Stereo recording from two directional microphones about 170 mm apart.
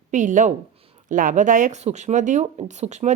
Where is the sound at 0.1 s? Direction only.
50° right (ahead or behind).